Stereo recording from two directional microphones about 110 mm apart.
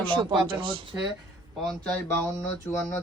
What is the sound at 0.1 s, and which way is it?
Speech, 45° right (ahead or behind).